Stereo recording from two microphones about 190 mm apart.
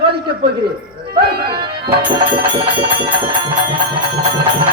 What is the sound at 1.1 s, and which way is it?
Speech, 55° right (ahead or behind).